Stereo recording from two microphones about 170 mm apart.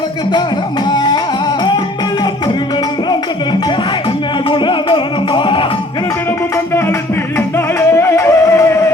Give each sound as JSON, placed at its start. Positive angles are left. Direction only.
{"t": 0.9, "sound": "music", "side_deg": 25}
{"t": 4.4, "sound": "music", "side_deg": 30}
{"t": 7.3, "sound": "music", "side_deg": 15}